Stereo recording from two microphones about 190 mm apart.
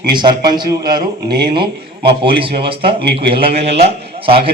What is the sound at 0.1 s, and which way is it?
A man's voice, 25° right (ahead or behind).